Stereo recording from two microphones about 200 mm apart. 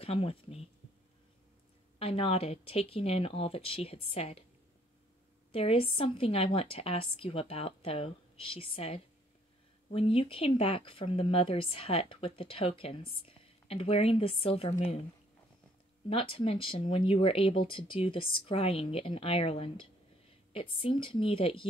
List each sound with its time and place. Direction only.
0.0 s speech: 30° left (ahead or behind)
2.0 s speech: 30° left (ahead or behind)
5.5 s speech: 30° left (ahead or behind)
16.1 s speech: 25° left (ahead or behind)